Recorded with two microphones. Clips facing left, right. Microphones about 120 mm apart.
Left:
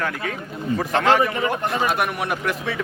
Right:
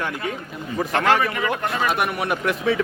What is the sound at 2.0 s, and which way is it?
Speech, centre (ahead or behind).